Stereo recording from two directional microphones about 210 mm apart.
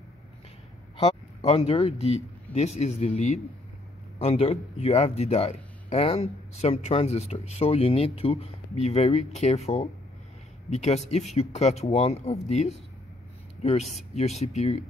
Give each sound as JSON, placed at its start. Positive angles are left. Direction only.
{"t": 0.9, "sound": "speech", "side_deg": 30}
{"t": 4.2, "sound": "a man's voice", "side_deg": 30}
{"t": 10.7, "sound": "speech", "side_deg": 30}